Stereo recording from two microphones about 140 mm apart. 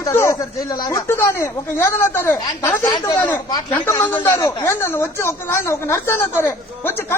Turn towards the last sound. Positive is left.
turn(degrees=15)  # may be behind; listen again after turning